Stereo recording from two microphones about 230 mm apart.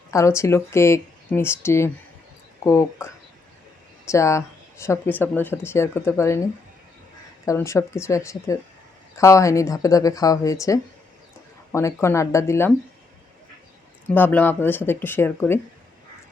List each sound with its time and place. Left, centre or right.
0.1 s speech: centre
14.1 s speech: centre